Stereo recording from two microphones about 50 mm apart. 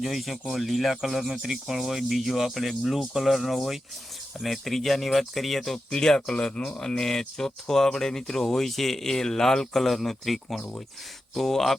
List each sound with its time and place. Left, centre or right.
0.0 s speech: centre